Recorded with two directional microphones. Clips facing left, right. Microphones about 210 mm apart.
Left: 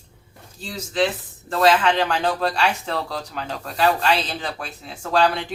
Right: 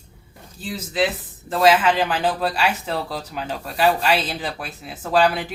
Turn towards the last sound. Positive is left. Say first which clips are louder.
# right 1 dB
turn(degrees=-5)  # may be behind; listen again after turning